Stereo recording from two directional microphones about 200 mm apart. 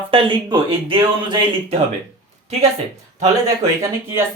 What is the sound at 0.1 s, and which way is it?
Speech, 25° right (ahead or behind).